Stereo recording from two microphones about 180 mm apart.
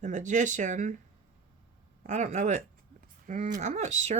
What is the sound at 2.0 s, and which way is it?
Speech, 40° right (ahead or behind).